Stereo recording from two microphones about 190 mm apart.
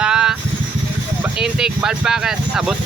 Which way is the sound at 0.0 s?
5° right (ahead or behind).